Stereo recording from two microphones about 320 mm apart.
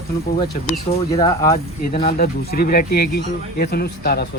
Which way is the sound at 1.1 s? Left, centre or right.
Centre.